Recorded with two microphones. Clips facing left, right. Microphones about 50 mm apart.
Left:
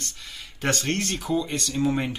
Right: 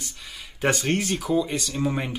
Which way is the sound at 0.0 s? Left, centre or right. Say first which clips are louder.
Even; centre.